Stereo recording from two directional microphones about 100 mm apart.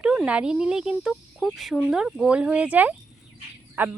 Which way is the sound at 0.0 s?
10° right (ahead or behind).